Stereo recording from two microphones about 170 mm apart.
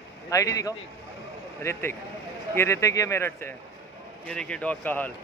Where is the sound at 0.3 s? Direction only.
20° left (ahead or behind).